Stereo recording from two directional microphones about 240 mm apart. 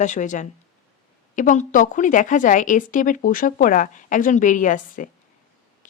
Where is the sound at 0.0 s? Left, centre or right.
Left.